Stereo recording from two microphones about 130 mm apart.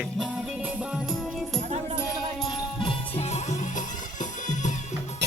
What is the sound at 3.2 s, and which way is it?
Music, 60° left (ahead or behind).